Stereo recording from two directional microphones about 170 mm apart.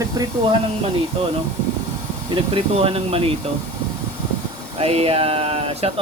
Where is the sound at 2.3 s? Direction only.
30° right (ahead or behind).